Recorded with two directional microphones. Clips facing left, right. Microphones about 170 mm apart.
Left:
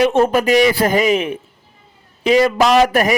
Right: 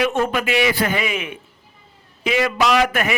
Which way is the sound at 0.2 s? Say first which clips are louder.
Left 7 dB; 40° left (ahead or behind).